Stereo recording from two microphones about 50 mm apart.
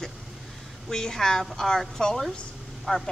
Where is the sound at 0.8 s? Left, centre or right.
Centre.